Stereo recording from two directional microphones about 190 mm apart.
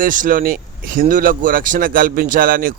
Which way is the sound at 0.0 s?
45° right (ahead or behind).